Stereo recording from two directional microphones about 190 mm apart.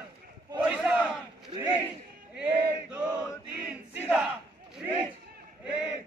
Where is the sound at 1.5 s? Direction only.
25° right (ahead or behind).